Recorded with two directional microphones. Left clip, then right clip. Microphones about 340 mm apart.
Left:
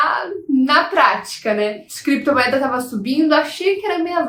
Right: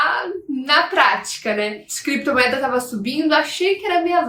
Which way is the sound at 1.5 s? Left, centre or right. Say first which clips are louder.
Left 3 dB; centre.